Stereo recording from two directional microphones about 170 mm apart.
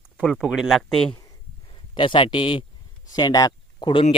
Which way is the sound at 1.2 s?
30° left (ahead or behind).